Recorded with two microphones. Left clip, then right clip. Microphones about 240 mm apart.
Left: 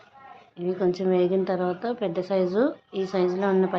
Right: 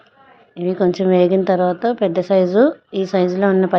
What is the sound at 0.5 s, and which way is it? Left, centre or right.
A woman's voice, right.